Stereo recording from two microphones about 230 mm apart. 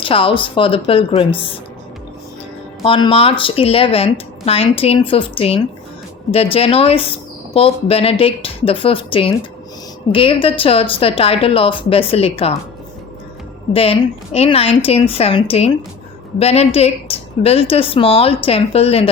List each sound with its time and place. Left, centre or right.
0.0 s speech: left
2.8 s speech: left
13.7 s speech: left